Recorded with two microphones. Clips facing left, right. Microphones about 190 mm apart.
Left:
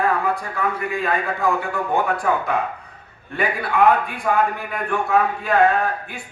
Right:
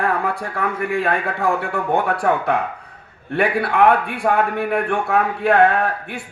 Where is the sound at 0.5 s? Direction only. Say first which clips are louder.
Right 2 dB; 70° right (ahead or behind).